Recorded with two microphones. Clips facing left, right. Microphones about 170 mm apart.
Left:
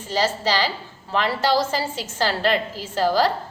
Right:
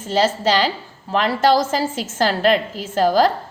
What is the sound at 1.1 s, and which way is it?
A woman's voice, 50° right (ahead or behind).